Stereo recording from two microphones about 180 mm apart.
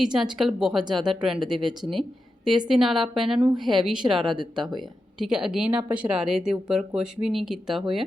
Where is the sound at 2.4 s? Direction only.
25° right (ahead or behind).